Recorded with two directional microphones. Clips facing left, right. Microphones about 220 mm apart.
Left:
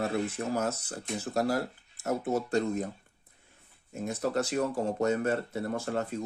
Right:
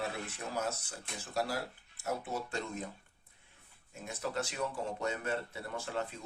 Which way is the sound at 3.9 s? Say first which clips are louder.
Left 8 dB; 45° left (ahead or behind).